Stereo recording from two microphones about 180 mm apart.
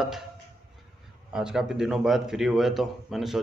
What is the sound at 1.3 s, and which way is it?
Speech, 5° right (ahead or behind).